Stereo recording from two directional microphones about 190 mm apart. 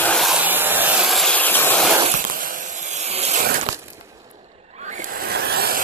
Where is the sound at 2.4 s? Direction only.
45° right (ahead or behind).